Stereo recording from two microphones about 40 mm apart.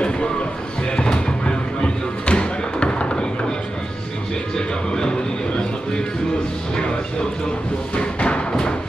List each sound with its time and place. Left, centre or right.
0.9 s music: left
4.6 s music: centre
7.9 s music: left